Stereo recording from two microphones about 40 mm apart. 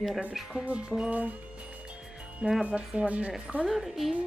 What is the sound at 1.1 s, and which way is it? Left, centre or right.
Speech, right.